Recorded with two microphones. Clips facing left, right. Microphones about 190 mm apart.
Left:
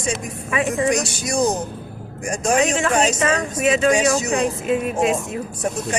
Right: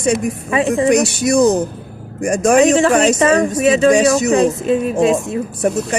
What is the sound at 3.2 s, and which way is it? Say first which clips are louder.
Speech: right 7 dB; 35° right (ahead or behind).